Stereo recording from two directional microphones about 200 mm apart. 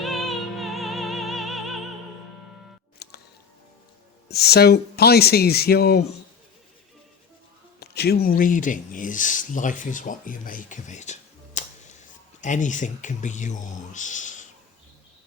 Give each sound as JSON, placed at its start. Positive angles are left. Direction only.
{"t": 0.0, "sound": "music", "side_deg": 0}
{"t": 3.0, "sound": "music", "side_deg": 55}
{"t": 4.3, "sound": "speech", "side_deg": 55}
{"t": 7.8, "sound": "speech", "side_deg": 55}